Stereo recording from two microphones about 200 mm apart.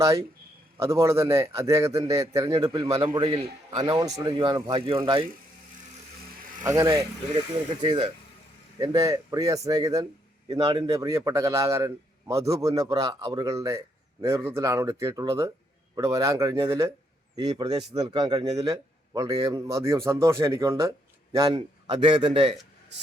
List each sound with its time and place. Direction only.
0.8 s a man's voice: 15° right (ahead or behind)
6.7 s a man's voice: 15° right (ahead or behind)